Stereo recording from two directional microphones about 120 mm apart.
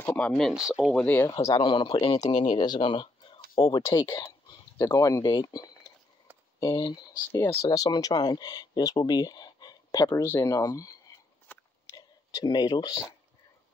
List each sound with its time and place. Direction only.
0.0 s speech: 15° left (ahead or behind)
0.4 s speech: centre (ahead or behind)
0.9 s speech: 15° left (ahead or behind)
1.6 s speech: 45° left (ahead or behind)
2.0 s speech: 30° left (ahead or behind)
4.2 s speech: 30° left (ahead or behind)
11.4 s biting: 15° left (ahead or behind)
12.4 s speech: 35° left (ahead or behind)